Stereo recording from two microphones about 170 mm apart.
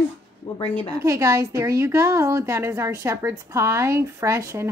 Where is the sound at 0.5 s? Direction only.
40° left (ahead or behind).